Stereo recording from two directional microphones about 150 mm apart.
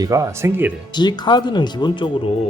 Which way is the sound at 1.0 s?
30° left (ahead or behind).